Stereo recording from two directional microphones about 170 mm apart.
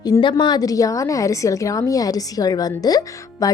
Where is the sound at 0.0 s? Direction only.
25° left (ahead or behind).